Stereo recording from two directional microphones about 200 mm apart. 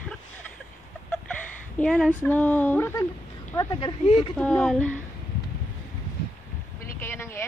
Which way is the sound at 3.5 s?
25° left (ahead or behind).